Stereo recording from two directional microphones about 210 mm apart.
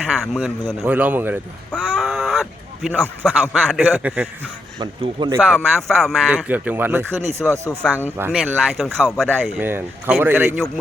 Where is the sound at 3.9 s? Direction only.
10° right (ahead or behind).